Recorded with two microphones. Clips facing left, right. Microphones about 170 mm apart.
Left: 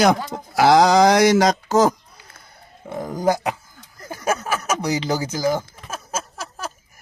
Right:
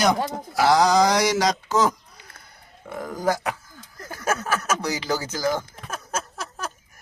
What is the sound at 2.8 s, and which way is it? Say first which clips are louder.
Speech: left 4 dB; 25° left (ahead or behind).